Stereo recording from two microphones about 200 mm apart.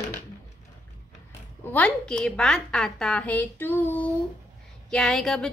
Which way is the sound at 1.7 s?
5° left (ahead or behind).